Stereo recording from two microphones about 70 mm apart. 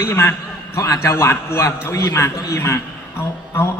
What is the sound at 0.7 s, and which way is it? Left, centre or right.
Speech, left.